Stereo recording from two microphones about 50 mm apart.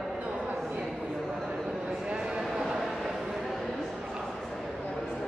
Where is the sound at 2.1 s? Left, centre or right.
Centre.